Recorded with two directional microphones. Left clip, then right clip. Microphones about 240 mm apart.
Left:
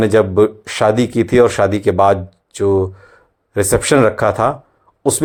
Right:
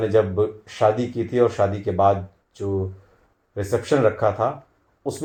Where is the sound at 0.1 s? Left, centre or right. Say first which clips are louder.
Left 7 dB; left.